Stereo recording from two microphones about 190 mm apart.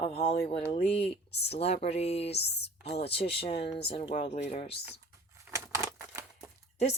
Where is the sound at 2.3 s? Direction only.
60° left (ahead or behind).